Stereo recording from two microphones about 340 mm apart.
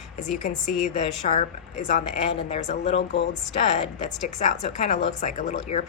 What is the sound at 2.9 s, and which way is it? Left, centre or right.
Speech, left.